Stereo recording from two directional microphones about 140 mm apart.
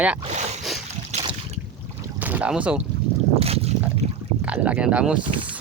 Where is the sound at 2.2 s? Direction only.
10° right (ahead or behind).